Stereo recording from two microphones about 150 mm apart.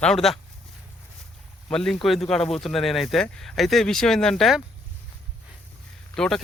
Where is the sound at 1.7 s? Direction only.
5° left (ahead or behind).